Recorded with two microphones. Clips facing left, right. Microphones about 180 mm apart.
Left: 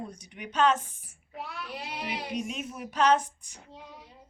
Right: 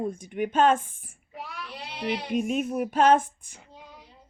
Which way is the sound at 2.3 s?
50° right (ahead or behind).